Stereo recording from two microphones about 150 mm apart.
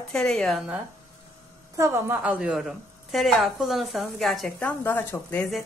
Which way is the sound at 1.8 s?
20° right (ahead or behind).